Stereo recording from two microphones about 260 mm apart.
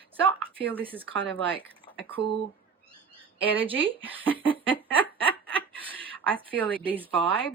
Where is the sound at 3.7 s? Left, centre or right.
Centre.